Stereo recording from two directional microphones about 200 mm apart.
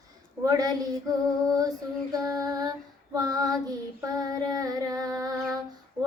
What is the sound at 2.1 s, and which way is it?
Female singing, 20° right (ahead or behind).